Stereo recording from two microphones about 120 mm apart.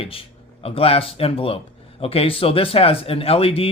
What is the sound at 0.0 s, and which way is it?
Speech, 50° left (ahead or behind).